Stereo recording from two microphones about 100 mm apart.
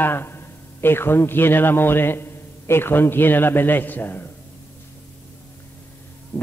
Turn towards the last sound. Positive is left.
turn(degrees=20)  # may be behind; listen again after turning